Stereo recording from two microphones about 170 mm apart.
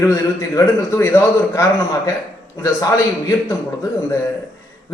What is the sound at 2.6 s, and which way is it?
Speech, 20° left (ahead or behind).